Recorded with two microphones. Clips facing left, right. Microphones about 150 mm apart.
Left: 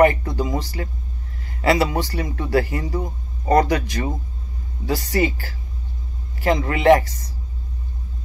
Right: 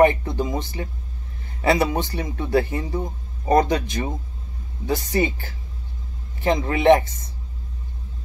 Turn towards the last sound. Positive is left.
turn(degrees=-20)  # may be behind; listen again after turning